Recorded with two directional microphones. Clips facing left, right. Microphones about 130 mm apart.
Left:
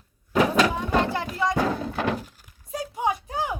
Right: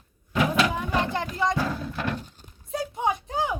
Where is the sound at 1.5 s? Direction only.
60° left (ahead or behind).